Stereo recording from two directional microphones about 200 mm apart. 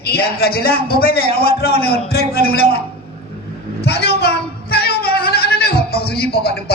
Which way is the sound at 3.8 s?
55° left (ahead or behind).